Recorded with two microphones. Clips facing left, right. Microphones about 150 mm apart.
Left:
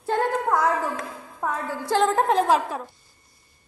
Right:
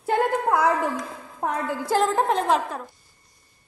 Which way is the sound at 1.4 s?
30° right (ahead or behind).